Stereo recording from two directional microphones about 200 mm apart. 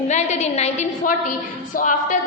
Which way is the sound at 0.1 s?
35° left (ahead or behind).